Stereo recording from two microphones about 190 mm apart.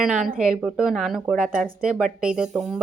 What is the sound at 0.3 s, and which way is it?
Speech, 5° right (ahead or behind).